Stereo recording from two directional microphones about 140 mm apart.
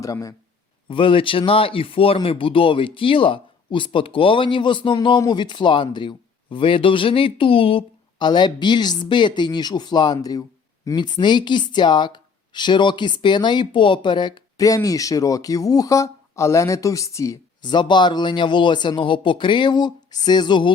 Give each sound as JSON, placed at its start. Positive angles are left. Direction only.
{"t": 0.0, "sound": "speech", "side_deg": 25}
{"t": 0.9, "sound": "speech", "side_deg": 40}
{"t": 17.7, "sound": "speech", "side_deg": 35}